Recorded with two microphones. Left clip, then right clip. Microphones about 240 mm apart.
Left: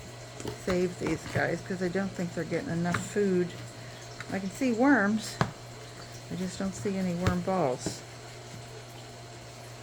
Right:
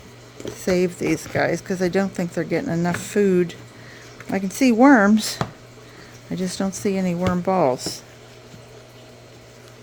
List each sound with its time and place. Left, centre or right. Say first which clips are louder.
0.6 s speech: right 9 dB; right
6.5 s speech: right 10 dB; right